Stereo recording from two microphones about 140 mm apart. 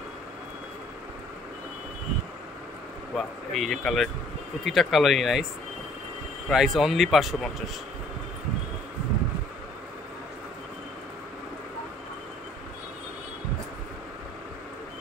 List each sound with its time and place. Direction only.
3.2 s speech: centre (ahead or behind)
6.5 s speech: centre (ahead or behind)